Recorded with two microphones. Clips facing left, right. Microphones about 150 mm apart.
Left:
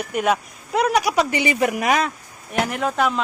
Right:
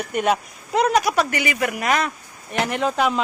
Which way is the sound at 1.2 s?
25° left (ahead or behind).